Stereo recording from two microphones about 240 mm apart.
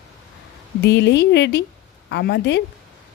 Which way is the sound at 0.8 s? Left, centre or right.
Left.